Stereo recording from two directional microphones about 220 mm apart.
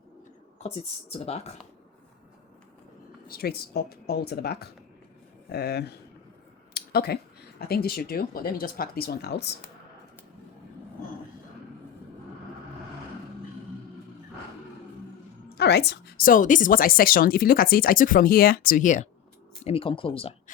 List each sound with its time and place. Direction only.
1.2 s speech: 25° left (ahead or behind)
3.2 s speech: 45° left (ahead or behind)
6.7 s a sound: 45° left (ahead or behind)
7.7 s speech: 45° left (ahead or behind)
15.4 s a woman's voice: 50° left (ahead or behind); by 20.3 s 25° left (ahead or behind)